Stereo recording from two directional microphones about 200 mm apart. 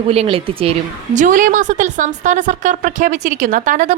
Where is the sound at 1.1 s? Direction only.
40° right (ahead or behind).